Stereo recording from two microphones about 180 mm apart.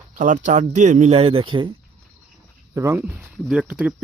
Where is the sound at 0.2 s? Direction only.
45° right (ahead or behind); by 1.7 s 30° right (ahead or behind).